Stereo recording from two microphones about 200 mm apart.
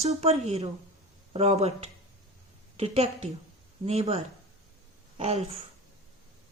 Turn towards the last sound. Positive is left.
turn(degrees=-30)  # may be behind; listen again after turning